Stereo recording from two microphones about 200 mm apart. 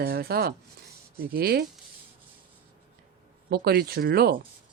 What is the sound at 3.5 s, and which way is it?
Speech, 50° right (ahead or behind).